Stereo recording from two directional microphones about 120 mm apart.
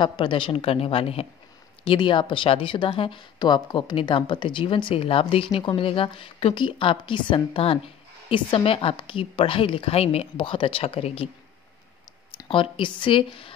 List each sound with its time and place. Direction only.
0.0 s speech: 40° left (ahead or behind)
1.9 s speech: 40° left (ahead or behind)
12.4 s speech: 45° left (ahead or behind)